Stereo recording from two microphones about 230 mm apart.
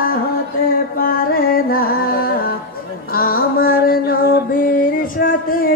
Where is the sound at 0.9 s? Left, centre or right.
Left.